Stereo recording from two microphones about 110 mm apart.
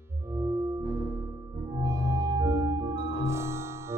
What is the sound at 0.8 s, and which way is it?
Music, 25° left (ahead or behind).